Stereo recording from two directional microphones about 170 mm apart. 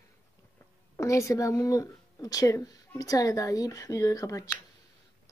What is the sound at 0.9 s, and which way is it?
Speech, 20° left (ahead or behind).